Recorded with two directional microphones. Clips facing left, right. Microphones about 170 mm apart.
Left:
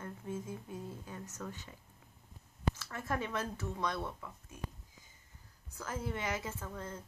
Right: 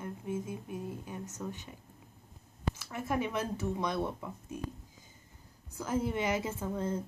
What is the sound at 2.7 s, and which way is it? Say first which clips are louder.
Speech: right 4 dB; 15° right (ahead or behind).